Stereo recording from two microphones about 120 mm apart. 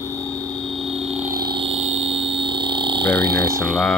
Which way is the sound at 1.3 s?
35° right (ahead or behind).